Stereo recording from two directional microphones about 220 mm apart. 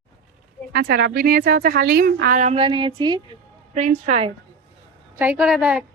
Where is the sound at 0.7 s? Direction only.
45° right (ahead or behind); by 3.4 s 20° right (ahead or behind).